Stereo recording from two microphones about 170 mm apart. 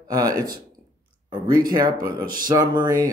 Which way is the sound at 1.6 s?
25° right (ahead or behind).